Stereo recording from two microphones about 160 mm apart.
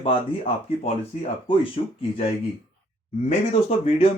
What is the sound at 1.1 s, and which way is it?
Speech, 45° left (ahead or behind).